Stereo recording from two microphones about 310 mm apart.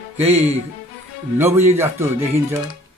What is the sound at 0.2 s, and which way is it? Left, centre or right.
Speech, centre.